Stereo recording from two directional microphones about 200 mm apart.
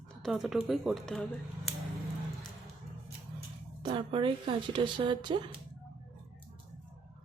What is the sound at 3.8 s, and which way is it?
Speech, 25° right (ahead or behind).